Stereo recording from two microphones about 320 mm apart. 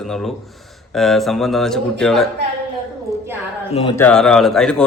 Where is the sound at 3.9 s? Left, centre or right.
Centre.